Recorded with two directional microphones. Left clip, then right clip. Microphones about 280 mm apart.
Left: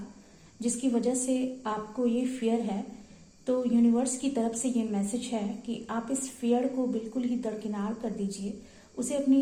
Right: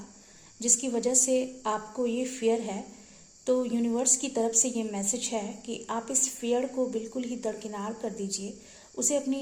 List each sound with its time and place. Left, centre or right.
0.6 s a woman's voice: right